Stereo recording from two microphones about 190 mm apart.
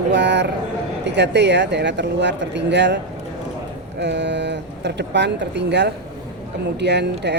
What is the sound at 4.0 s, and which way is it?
Speech, 65° right (ahead or behind).